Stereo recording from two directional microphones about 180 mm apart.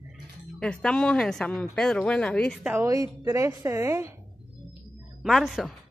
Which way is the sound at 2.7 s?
15° right (ahead or behind).